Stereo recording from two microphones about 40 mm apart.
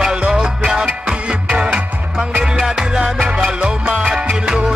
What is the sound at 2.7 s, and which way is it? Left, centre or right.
Music, centre.